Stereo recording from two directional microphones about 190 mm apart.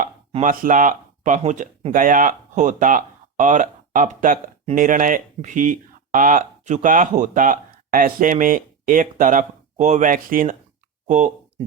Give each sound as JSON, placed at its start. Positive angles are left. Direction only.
{"t": 0.0, "sound": "speech", "side_deg": -45}